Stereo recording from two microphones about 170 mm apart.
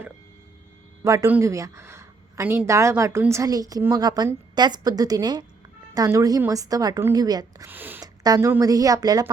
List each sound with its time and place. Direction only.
1.0 s a woman's voice: 20° right (ahead or behind)
7.7 s speech: 10° right (ahead or behind)
8.0 s a woman's voice: 20° right (ahead or behind)